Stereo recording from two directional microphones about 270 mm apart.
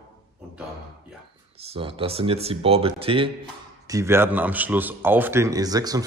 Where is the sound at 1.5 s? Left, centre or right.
Right.